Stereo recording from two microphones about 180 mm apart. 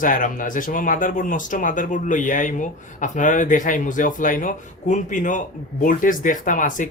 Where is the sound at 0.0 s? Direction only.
45° left (ahead or behind).